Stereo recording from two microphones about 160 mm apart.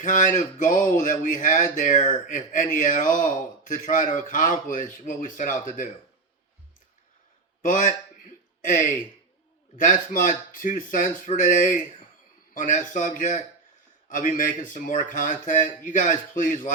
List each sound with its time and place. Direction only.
0.0 s speech: 50° left (ahead or behind)
7.6 s speech: 55° left (ahead or behind)